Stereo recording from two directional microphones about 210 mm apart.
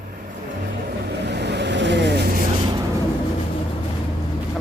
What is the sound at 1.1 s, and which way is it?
Vehicle, 50° right (ahead or behind).